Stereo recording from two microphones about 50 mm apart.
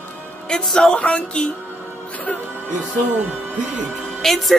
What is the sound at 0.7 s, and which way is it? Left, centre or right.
Speech, centre.